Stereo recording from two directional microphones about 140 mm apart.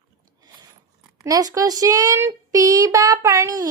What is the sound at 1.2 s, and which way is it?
A woman's voice, 25° right (ahead or behind).